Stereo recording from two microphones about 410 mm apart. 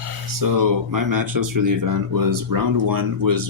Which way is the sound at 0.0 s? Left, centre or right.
Right.